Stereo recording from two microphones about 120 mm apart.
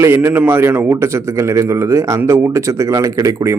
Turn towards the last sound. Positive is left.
turn(degrees=-25)  # may be behind; listen again after turning